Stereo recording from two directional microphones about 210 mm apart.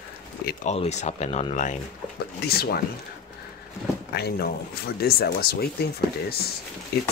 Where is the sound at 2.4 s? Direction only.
45° left (ahead or behind).